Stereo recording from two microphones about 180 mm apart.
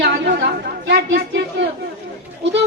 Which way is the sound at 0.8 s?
70° right (ahead or behind).